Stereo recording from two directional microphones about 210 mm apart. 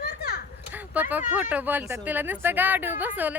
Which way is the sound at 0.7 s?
10° right (ahead or behind).